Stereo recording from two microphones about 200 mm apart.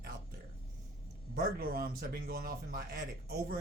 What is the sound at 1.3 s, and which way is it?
Speech, 45° right (ahead or behind).